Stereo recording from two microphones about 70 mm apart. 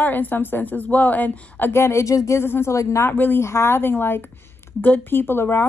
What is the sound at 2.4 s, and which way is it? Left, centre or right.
Speech, left.